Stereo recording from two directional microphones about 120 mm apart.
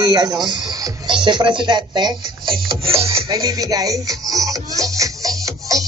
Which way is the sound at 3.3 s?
30° right (ahead or behind).